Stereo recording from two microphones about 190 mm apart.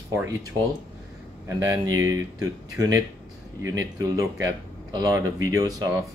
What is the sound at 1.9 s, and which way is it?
Speech, 15° right (ahead or behind).